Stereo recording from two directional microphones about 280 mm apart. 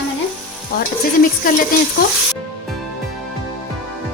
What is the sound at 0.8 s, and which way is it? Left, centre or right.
Speech, left.